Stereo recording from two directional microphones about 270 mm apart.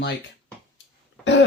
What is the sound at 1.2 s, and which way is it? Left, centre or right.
Cough, left.